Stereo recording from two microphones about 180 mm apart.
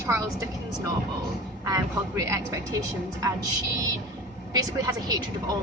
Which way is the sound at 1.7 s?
15° right (ahead or behind).